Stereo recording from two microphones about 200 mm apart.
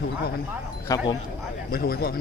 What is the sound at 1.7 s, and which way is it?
Speech, 50° left (ahead or behind).